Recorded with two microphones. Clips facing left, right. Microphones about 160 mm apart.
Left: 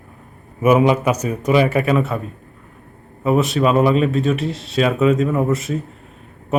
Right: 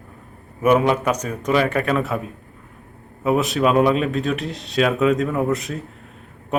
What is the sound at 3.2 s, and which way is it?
Speech, centre (ahead or behind).